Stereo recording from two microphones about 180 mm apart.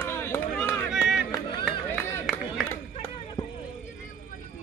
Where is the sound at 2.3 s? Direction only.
5° right (ahead or behind).